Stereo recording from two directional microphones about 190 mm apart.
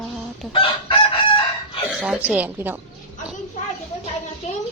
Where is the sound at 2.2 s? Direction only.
10° right (ahead or behind).